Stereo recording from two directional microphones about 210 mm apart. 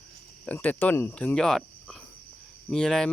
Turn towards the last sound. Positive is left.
turn(degrees=5)  # may be behind; listen again after turning